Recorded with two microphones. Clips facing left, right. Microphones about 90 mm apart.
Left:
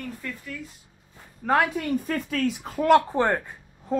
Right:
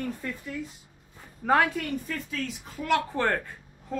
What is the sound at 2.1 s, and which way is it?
Speech, 60° left (ahead or behind).